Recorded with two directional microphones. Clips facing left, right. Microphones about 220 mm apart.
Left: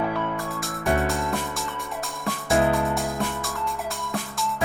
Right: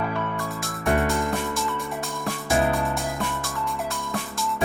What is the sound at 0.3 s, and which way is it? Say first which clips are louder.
Music: even; centre (ahead or behind).